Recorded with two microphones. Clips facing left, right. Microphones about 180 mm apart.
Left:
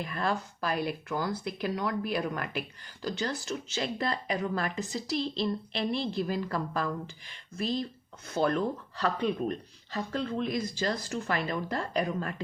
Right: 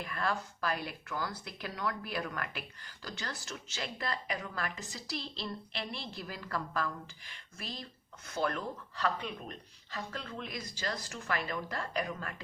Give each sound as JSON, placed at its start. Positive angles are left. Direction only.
{"t": 0.0, "sound": "speech", "side_deg": 20}